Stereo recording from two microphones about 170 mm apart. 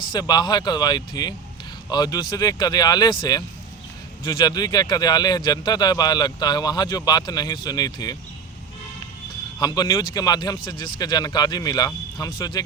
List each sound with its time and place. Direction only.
0.1 s a man's voice: 25° left (ahead or behind)
9.6 s a man's voice: 25° left (ahead or behind)